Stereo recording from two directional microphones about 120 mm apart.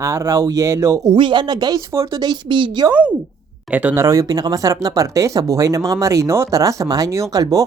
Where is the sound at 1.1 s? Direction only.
40° right (ahead or behind).